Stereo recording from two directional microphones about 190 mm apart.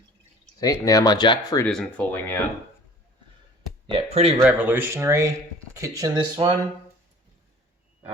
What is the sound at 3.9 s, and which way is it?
Speech, 30° right (ahead or behind).